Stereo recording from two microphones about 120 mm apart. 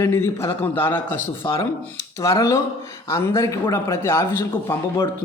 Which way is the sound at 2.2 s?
25° left (ahead or behind).